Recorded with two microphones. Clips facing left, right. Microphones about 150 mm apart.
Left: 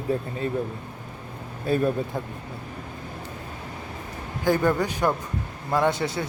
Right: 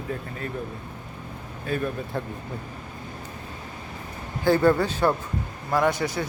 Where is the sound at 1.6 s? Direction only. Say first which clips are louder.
Left 5 dB; 35° left (ahead or behind).